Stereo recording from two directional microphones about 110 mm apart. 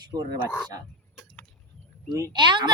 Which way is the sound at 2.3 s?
45° right (ahead or behind).